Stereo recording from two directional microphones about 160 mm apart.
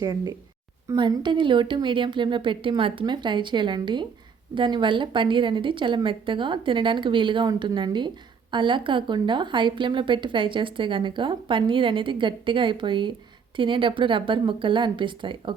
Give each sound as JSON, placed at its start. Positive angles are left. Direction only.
{"t": 0.0, "sound": "a woman's voice", "side_deg": -25}